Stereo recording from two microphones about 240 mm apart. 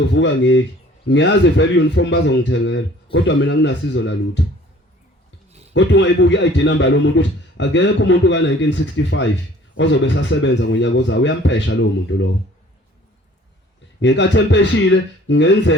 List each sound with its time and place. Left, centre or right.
0.1 s a man's voice: left
5.7 s a man's voice: left
14.0 s a man's voice: left